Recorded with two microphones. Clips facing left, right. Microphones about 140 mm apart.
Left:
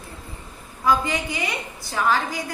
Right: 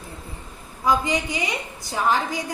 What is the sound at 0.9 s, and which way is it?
A woman's voice, 20° right (ahead or behind).